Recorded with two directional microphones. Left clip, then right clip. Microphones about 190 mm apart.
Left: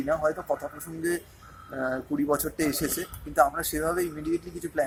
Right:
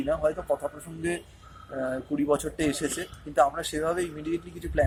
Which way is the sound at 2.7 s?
30° right (ahead or behind).